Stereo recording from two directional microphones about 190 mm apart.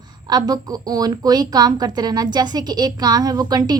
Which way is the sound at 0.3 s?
20° right (ahead or behind).